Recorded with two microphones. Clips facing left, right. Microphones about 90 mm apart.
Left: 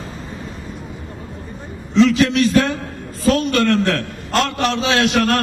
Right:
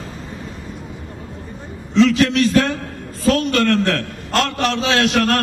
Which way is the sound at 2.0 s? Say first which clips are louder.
Even; 15° left (ahead or behind).